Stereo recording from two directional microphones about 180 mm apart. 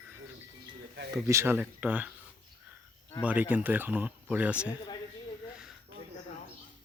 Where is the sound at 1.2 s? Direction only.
15° right (ahead or behind).